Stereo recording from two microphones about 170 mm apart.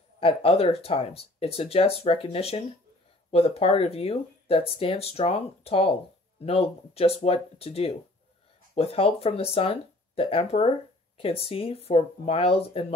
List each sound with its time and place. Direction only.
0.2 s speech: 35° left (ahead or behind)